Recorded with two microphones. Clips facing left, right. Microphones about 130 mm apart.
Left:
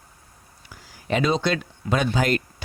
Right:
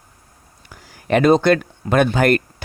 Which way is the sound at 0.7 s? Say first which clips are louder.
Right 7 dB; 60° right (ahead or behind).